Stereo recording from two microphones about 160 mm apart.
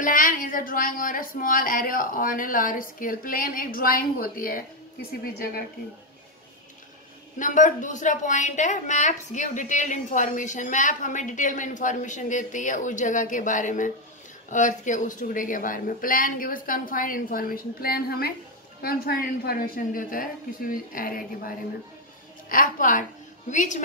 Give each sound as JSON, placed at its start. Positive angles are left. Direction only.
{"t": 0.0, "sound": "a woman's voice", "side_deg": 60}
{"t": 7.3, "sound": "a woman's voice", "side_deg": 55}